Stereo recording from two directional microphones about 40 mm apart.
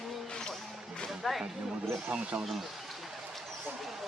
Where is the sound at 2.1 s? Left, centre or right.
Right.